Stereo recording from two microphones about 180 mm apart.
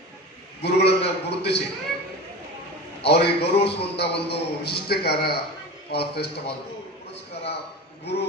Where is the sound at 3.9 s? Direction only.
65° left (ahead or behind).